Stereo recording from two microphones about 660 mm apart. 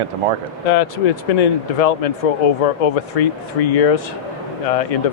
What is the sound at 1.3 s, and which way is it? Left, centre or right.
Speech, left.